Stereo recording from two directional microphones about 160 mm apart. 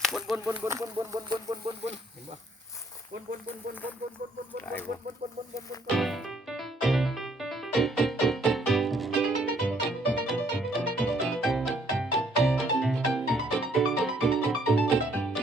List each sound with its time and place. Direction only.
0.0 s a sound: centre (ahead or behind)
0.3 s speech: 15° right (ahead or behind)
4.5 s chicken: 10° left (ahead or behind)
6.0 s music: centre (ahead or behind)